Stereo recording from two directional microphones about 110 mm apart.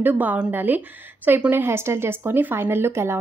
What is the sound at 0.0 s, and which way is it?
A woman's voice, 15° right (ahead or behind).